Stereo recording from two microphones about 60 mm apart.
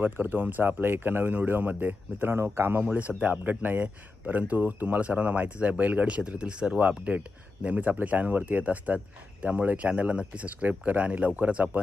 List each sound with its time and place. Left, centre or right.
0.0 s speech: right
2.8 s speech: right